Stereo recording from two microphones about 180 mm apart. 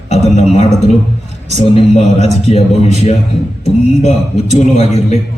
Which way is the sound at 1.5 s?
35° left (ahead or behind).